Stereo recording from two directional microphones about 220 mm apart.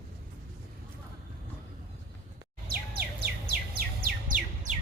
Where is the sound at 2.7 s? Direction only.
45° right (ahead or behind).